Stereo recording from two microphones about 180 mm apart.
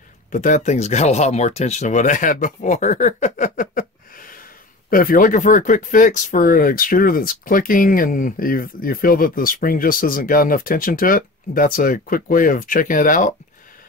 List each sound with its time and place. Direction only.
0.3 s speech: 45° left (ahead or behind)